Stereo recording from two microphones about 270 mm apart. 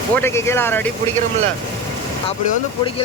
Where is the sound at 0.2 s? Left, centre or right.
Centre.